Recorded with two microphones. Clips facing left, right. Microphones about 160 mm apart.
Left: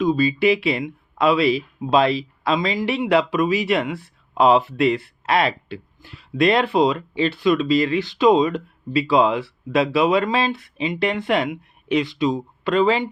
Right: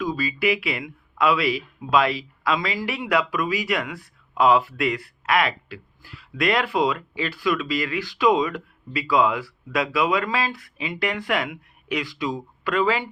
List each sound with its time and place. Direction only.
0.0 s speech: 25° left (ahead or behind)